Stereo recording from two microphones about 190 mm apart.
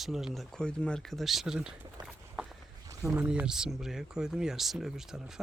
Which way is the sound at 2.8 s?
15° right (ahead or behind).